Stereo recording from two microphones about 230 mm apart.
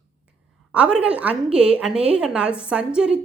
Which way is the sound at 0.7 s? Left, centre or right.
Centre.